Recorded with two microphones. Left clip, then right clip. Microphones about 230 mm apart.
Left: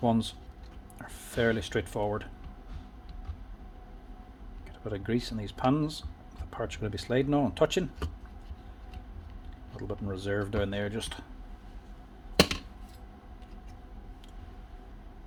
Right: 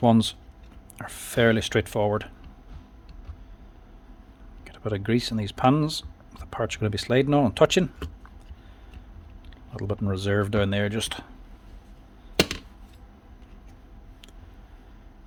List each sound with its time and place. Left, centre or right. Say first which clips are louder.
0.0 s speech: right 8 dB; right
4.6 s speech: right 7 dB; right
9.7 s speech: right 7 dB; right